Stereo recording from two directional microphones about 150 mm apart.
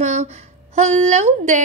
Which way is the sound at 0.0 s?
45° right (ahead or behind).